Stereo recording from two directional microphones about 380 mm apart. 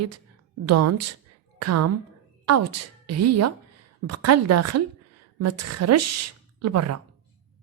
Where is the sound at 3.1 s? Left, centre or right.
Right.